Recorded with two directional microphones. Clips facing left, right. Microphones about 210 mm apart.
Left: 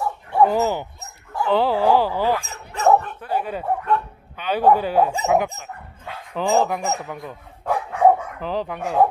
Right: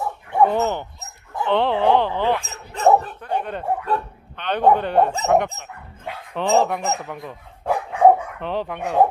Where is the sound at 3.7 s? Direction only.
35° right (ahead or behind).